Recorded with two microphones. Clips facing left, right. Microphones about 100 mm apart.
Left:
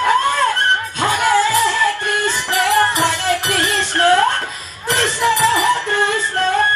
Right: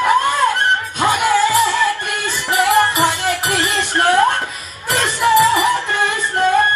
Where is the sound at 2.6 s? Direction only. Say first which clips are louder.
Right 2 dB; 15° right (ahead or behind).